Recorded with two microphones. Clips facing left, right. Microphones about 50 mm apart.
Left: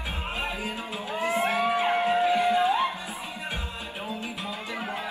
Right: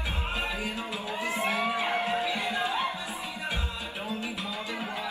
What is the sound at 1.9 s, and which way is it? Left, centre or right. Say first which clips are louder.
Music: left 6 dB; left.